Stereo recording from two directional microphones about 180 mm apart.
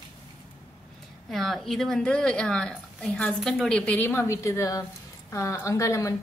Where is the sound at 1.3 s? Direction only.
Centre (ahead or behind).